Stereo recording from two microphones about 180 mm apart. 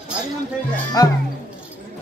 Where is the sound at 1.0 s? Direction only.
20° left (ahead or behind).